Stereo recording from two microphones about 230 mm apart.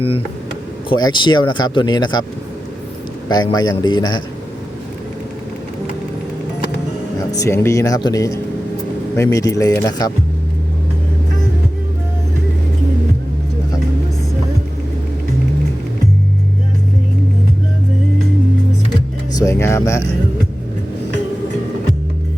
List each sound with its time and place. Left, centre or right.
0.9 s speech: centre
3.2 s speech: centre
7.3 s speech: centre
19.3 s speech: centre